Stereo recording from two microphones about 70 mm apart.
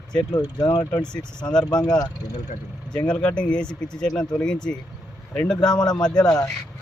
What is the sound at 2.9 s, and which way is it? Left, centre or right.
Speech, centre.